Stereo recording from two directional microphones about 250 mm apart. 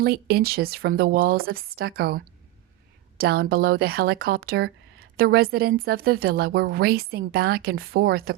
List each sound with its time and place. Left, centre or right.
0.0 s speech: right